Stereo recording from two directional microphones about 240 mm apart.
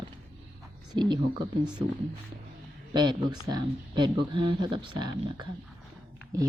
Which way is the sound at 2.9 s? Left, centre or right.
Centre.